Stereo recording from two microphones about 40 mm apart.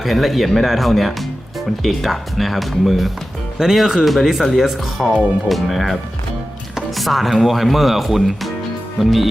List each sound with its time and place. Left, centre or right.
0.0 s speech: centre